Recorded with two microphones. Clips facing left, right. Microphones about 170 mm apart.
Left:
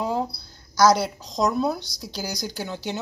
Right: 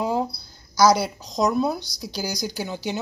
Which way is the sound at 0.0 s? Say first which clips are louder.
Right 2 dB; 5° right (ahead or behind).